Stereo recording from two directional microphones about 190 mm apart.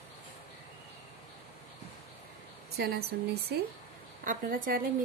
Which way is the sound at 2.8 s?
55° right (ahead or behind).